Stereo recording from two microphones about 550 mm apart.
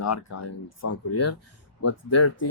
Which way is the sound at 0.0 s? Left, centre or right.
Left.